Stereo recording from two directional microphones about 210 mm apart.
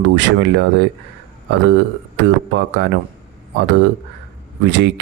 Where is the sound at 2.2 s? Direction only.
55° right (ahead or behind).